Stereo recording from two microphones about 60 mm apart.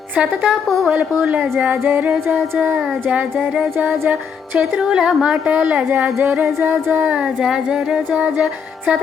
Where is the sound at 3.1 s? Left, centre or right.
Right.